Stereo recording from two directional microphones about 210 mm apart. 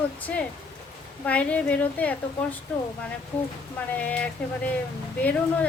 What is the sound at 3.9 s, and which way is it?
Speech, 5° left (ahead or behind).